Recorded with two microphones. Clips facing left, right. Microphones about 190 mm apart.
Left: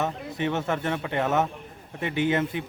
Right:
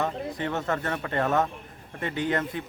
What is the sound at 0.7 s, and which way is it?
Speech, 15° left (ahead or behind).